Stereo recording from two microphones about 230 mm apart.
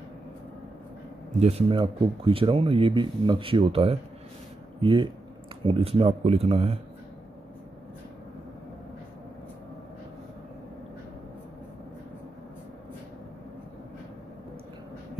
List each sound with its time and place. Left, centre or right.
1.4 s speech: right